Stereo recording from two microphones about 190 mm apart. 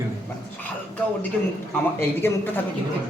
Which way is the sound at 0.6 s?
10° left (ahead or behind).